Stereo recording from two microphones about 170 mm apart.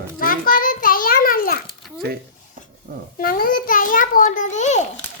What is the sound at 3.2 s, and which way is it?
A child's voice, 60° left (ahead or behind).